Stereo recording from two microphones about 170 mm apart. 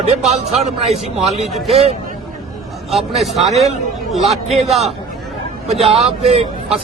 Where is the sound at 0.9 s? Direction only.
Centre (ahead or behind).